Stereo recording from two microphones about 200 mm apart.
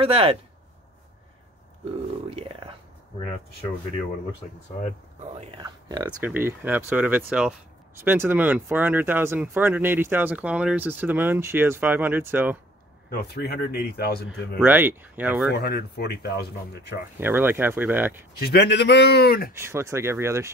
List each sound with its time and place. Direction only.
0.0 s speech: 30° right (ahead or behind)
2.2 s whispering: 30° right (ahead or behind)
5.6 s speech: 20° right (ahead or behind)
6.2 s speech: 10° right (ahead or behind)
13.1 s speech: 55° left (ahead or behind)
14.6 s speech: 10° right (ahead or behind)
15.5 s speech: 55° left (ahead or behind)
17.2 s speech: 10° right (ahead or behind)
18.4 s speech: 55° left (ahead or behind)
19.5 s speech: 10° right (ahead or behind)